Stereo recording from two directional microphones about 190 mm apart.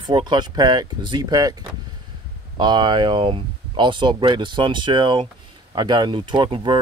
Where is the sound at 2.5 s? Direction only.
25° right (ahead or behind).